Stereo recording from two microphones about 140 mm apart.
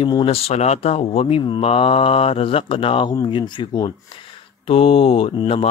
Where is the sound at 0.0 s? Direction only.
40° left (ahead or behind).